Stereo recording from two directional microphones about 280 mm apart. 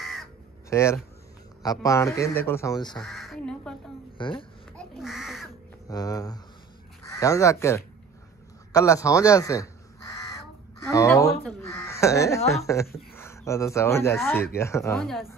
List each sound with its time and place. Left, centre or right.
0.0 s crow: centre
0.7 s speech: centre
3.0 s speech: centre
4.2 s speech: centre
4.7 s speech: centre
5.9 s speech: centre
8.7 s crow: centre
12.9 s speech: centre